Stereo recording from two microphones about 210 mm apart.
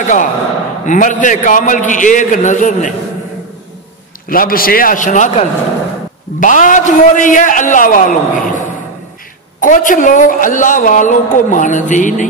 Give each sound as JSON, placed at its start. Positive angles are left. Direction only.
{"t": 0.0, "sound": "a woman's voice", "side_deg": 35}
{"t": 4.3, "sound": "a woman's voice", "side_deg": 45}